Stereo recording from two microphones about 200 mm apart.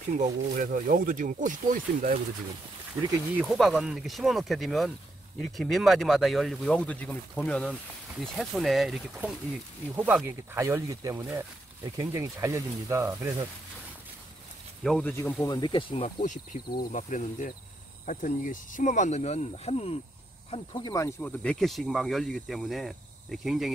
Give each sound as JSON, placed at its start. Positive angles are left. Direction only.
{"t": 0.2, "sound": "speech", "side_deg": -45}
{"t": 3.3, "sound": "speech", "side_deg": 0}
{"t": 14.8, "sound": "speech", "side_deg": 5}
{"t": 15.5, "sound": "speech", "side_deg": 25}
{"t": 16.9, "sound": "speech", "side_deg": 40}